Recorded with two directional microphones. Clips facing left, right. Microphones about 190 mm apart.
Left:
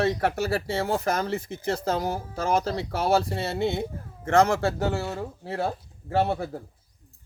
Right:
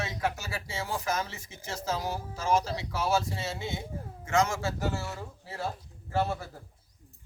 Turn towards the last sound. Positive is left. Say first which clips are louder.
# left 6 dB
turn(degrees=60)  # may be behind; listen again after turning